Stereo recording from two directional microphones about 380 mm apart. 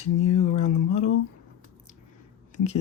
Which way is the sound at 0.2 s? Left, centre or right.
Left.